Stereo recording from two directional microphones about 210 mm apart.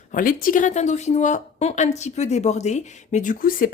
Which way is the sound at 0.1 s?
40° left (ahead or behind).